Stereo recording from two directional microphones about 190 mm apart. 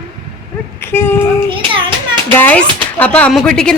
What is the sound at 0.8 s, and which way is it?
Speech, 10° left (ahead or behind).